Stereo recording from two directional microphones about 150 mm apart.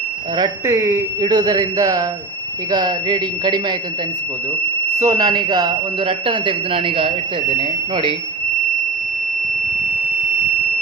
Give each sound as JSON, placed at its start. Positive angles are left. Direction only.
{"t": 0.3, "sound": "speech", "side_deg": -30}
{"t": 0.7, "sound": "speech", "side_deg": -15}
{"t": 1.2, "sound": "speech", "side_deg": -30}
{"t": 4.9, "sound": "speech", "side_deg": -25}